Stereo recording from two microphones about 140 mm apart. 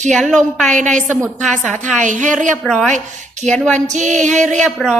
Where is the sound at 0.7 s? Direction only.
60° right (ahead or behind).